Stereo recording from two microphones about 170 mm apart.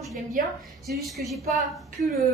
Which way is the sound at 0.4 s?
55° right (ahead or behind).